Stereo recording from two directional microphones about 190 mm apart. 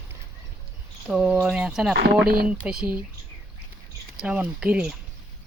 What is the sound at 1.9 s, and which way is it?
Speech, 55° right (ahead or behind).